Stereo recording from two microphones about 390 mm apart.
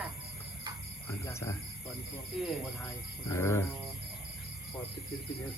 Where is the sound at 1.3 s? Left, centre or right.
Centre.